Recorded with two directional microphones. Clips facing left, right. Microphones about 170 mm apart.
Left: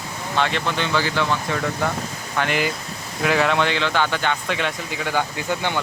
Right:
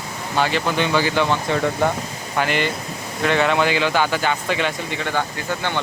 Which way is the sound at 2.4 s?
Centre (ahead or behind).